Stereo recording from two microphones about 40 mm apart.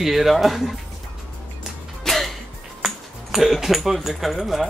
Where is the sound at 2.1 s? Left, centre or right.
Centre.